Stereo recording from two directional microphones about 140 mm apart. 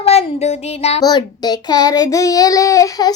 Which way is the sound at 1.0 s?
30° left (ahead or behind).